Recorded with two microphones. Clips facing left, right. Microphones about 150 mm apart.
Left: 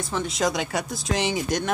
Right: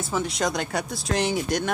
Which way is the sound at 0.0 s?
Centre (ahead or behind).